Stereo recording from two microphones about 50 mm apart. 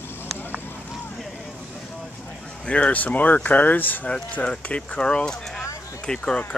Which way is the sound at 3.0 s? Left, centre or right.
Left.